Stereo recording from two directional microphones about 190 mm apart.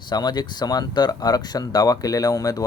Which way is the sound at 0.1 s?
20° left (ahead or behind).